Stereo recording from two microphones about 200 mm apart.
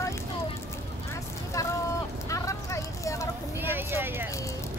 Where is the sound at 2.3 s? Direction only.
15° left (ahead or behind).